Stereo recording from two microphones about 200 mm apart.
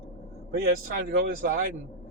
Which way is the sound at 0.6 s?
50° right (ahead or behind).